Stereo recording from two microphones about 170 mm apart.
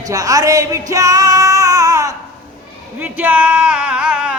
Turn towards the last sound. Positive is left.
turn(degrees=-5)  # may be behind; listen again after turning